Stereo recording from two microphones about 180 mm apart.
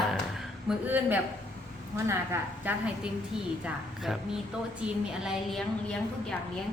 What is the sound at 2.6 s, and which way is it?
Speech, 5° right (ahead or behind).